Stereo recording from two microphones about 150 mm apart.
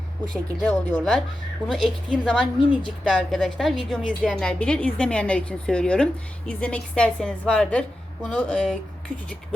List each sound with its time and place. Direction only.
0.6 s a woman's voice: 5° left (ahead or behind)